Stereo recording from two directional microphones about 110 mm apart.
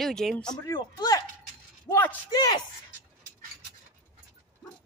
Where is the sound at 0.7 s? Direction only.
40° left (ahead or behind).